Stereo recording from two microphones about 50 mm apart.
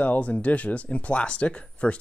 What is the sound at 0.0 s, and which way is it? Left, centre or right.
Speech, left.